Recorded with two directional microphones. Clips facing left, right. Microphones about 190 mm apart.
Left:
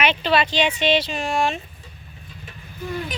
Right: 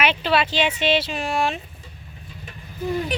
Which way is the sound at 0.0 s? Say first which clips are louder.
Left 1 dB; 5° right (ahead or behind).